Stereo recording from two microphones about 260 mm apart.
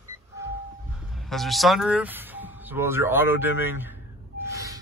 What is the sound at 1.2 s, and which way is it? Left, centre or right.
Speech, centre.